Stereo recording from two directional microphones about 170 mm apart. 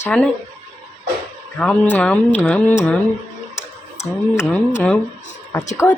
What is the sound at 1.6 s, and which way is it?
Speech, 10° left (ahead or behind).